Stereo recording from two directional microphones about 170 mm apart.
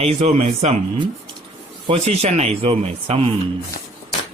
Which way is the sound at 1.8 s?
40° right (ahead or behind).